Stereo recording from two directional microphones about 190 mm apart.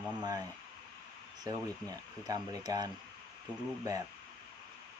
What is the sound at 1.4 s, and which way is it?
Speech, 20° right (ahead or behind).